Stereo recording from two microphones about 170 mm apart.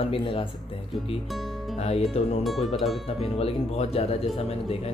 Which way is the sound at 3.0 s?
35° left (ahead or behind).